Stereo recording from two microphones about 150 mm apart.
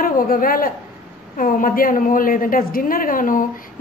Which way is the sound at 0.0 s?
70° left (ahead or behind).